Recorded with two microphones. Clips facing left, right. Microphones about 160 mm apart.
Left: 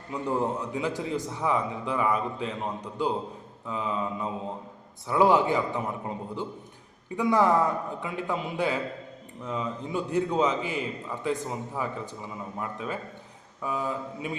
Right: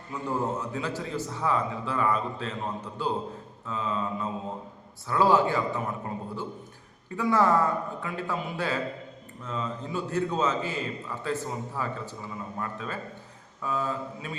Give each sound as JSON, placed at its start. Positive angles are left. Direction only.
{"t": 0.1, "sound": "a man's voice", "side_deg": 15}
{"t": 7.2, "sound": "a man's voice", "side_deg": 15}